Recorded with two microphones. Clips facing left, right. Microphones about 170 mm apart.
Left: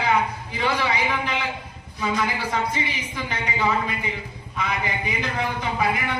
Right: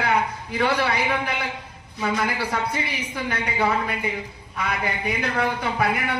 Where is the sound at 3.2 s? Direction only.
60° right (ahead or behind).